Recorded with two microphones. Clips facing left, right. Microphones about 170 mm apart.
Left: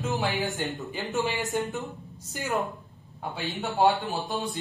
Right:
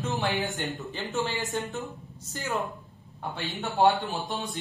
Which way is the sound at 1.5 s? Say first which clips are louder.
Left 3 dB; 15° left (ahead or behind).